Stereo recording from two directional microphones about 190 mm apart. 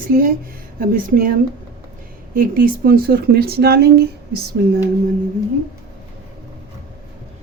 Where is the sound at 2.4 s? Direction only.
50° right (ahead or behind).